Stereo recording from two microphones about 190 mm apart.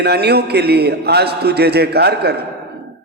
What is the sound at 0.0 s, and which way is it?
Speech, 60° right (ahead or behind).